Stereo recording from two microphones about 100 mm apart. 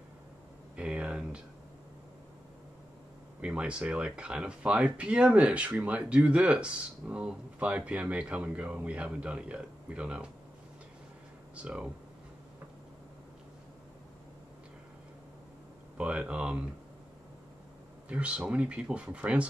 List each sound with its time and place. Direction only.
0.7 s a sound: 10° right (ahead or behind)
3.3 s speech: 10° right (ahead or behind)
11.5 s speech: 10° right (ahead or behind)
16.0 s speech: 10° right (ahead or behind)
18.0 s speech: 10° right (ahead or behind)